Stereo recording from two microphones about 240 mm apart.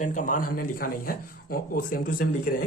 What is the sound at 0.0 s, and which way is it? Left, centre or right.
Speech, left.